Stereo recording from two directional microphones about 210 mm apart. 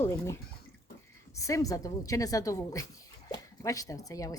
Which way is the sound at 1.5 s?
15° left (ahead or behind).